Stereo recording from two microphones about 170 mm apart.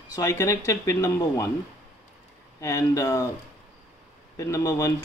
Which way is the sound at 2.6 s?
20° left (ahead or behind).